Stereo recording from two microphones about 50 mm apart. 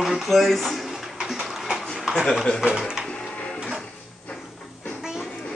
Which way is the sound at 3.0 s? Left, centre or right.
Centre.